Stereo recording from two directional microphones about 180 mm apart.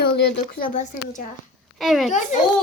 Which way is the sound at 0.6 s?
45° left (ahead or behind).